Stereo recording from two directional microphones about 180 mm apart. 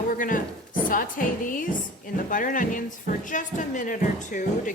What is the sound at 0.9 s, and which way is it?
A woman's voice, 50° left (ahead or behind).